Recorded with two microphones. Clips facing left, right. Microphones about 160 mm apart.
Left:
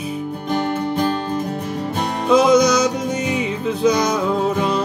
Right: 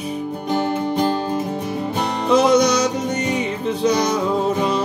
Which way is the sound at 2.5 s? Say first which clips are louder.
Left 1 dB; 30° right (ahead or behind).